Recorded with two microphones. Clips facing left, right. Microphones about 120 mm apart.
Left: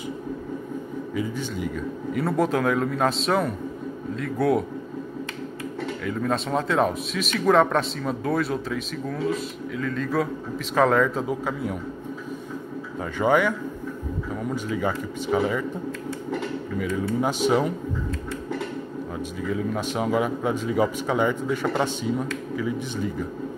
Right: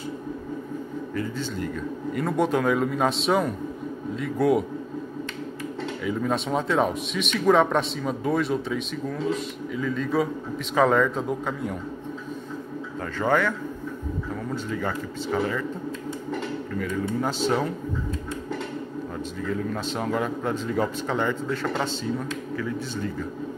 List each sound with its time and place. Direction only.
1.1 s a man's voice: 10° left (ahead or behind)
6.0 s a man's voice: centre (ahead or behind)
13.2 s speech: 10° left (ahead or behind)
16.3 s a sound: 10° left (ahead or behind)
17.2 s speech: 10° left (ahead or behind)
19.1 s speech: 5° left (ahead or behind)